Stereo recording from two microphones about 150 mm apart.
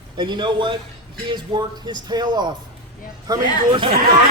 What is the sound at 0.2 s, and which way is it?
A man's voice, 30° right (ahead or behind).